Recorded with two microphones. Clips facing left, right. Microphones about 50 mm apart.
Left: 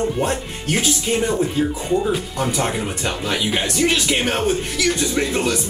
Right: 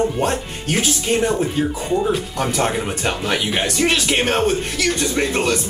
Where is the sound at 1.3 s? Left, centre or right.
Right.